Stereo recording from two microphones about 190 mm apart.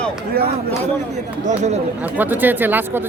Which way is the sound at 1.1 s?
35° right (ahead or behind).